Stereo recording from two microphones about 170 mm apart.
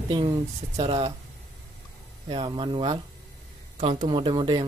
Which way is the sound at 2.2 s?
30° right (ahead or behind).